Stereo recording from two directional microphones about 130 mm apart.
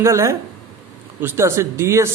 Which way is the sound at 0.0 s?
20° right (ahead or behind).